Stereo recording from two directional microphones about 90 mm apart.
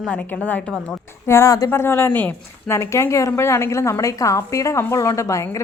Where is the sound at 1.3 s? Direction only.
30° left (ahead or behind).